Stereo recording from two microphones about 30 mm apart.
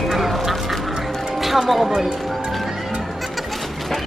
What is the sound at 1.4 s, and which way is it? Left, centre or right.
Music, centre.